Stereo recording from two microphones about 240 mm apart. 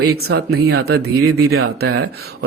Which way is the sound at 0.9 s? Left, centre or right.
Right.